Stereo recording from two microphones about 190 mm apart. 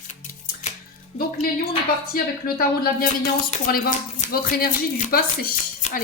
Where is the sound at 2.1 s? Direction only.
50° left (ahead or behind).